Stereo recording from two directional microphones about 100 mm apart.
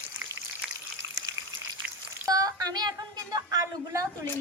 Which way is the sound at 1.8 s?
15° right (ahead or behind).